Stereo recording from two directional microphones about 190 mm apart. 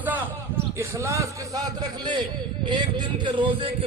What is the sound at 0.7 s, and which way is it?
A man's voice, 15° right (ahead or behind).